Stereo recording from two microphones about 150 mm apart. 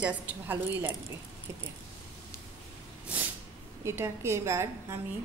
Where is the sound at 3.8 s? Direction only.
15° right (ahead or behind).